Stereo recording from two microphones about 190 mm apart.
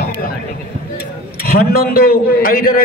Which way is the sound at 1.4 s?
55° left (ahead or behind).